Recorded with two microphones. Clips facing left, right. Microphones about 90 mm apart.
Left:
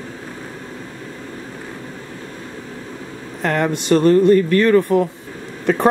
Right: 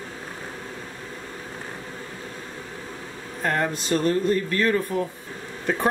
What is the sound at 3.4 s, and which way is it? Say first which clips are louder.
Speech: left 5 dB; 80° left.